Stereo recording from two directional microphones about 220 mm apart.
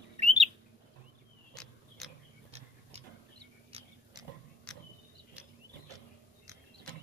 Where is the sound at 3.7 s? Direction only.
25° right (ahead or behind).